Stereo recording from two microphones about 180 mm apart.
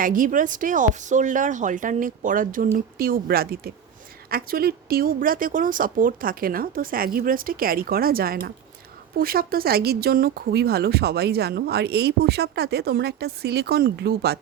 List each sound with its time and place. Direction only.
0.0 s speech: 50° right (ahead or behind)